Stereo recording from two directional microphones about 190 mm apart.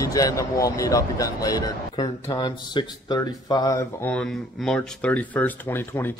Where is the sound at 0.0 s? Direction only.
20° left (ahead or behind).